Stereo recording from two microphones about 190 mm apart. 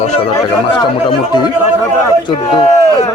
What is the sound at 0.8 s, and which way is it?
A man's voice, 20° left (ahead or behind).